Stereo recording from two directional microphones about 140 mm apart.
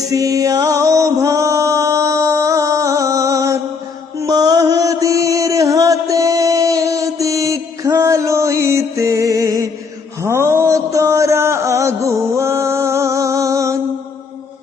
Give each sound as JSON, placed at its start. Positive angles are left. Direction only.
{"t": 0.1, "sound": "music", "side_deg": -25}
{"t": 4.2, "sound": "mantra", "side_deg": -25}
{"t": 10.2, "sound": "music", "side_deg": -20}